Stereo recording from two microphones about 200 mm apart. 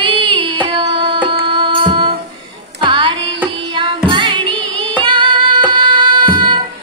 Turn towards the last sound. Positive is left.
turn(degrees=-25)  # may be behind; listen again after turning